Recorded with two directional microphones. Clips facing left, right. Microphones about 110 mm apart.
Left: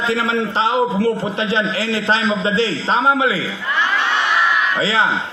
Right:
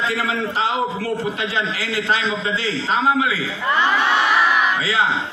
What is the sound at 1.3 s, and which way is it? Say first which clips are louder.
A man's voice: left 4 dB; 30° left (ahead or behind).